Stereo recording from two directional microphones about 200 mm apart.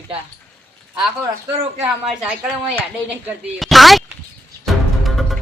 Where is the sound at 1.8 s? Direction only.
5° right (ahead or behind).